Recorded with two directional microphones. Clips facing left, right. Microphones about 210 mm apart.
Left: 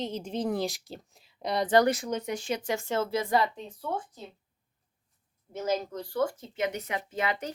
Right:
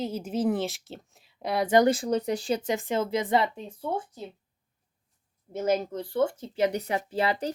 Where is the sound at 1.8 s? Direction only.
30° right (ahead or behind).